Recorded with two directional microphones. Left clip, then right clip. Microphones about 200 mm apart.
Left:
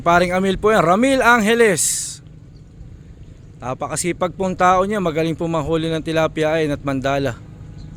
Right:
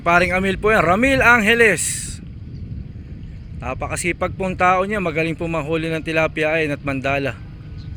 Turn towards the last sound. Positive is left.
turn(degrees=20)  # may be behind; listen again after turning